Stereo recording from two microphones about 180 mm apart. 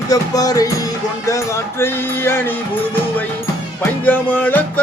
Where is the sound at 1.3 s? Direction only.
15° left (ahead or behind).